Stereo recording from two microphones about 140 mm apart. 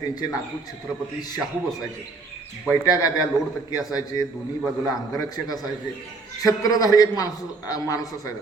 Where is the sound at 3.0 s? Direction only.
25° left (ahead or behind).